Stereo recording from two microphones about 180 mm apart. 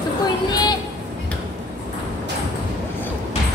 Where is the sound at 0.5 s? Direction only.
25° left (ahead or behind).